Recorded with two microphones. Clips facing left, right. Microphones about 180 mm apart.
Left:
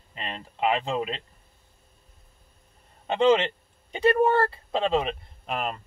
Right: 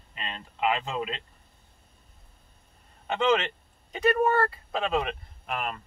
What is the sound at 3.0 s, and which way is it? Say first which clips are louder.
Speech: left 4 dB; 30° left (ahead or behind).